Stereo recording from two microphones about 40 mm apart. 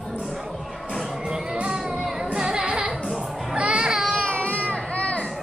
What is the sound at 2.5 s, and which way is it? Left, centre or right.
Music, right.